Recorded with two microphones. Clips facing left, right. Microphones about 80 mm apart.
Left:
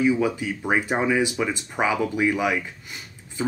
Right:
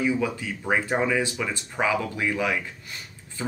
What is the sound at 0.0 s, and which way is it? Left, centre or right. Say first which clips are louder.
Speech: left 4 dB; centre.